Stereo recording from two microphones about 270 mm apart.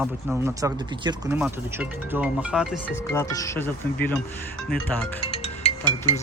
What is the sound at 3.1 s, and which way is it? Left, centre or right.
Speech, centre.